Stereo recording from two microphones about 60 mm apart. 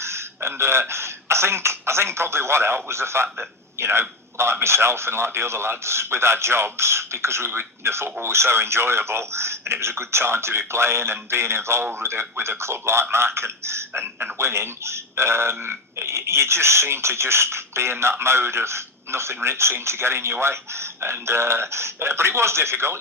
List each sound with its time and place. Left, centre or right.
0.0 s a man's voice: right